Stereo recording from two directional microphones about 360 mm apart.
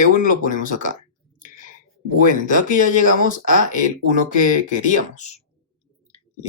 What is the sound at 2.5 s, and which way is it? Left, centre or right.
Speech, left.